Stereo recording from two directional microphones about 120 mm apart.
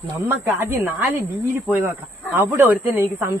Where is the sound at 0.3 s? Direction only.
20° right (ahead or behind).